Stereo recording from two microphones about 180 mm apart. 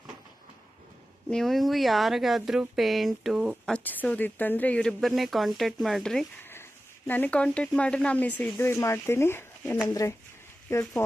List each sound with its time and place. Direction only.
1.3 s speech: centre (ahead or behind)
3.8 s speech: 10° left (ahead or behind)